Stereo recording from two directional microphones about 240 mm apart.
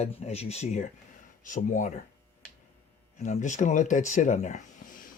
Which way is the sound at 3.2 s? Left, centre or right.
Left.